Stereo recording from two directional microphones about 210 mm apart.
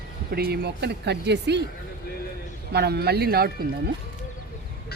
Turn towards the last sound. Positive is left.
turn(degrees=-45)  # may be behind; listen again after turning